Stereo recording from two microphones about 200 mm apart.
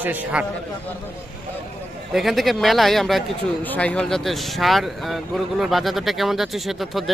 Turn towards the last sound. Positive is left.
turn(degrees=0)  # may be behind; listen again after turning